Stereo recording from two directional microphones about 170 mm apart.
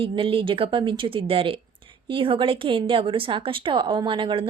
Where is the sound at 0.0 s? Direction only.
30° right (ahead or behind).